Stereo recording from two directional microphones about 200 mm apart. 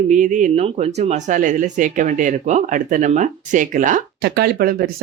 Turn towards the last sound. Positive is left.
turn(degrees=-45)  # may be behind; listen again after turning